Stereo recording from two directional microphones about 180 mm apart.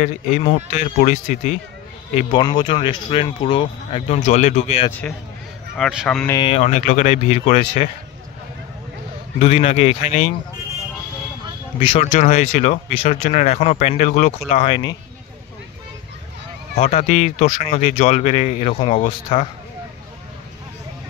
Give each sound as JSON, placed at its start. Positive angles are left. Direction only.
{"t": 0.0, "sound": "speech", "side_deg": 40}
{"t": 2.3, "sound": "speech", "side_deg": 25}
{"t": 5.8, "sound": "speech", "side_deg": 0}
{"t": 6.3, "sound": "speech", "side_deg": 30}
{"t": 6.6, "sound": "speech", "side_deg": 45}
{"t": 9.4, "sound": "speech", "side_deg": 35}
{"t": 11.8, "sound": "speech", "side_deg": 35}
{"t": 16.7, "sound": "speech", "side_deg": 40}